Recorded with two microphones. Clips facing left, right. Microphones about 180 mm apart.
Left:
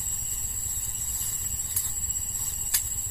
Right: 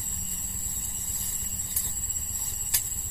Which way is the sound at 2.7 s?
20° right (ahead or behind).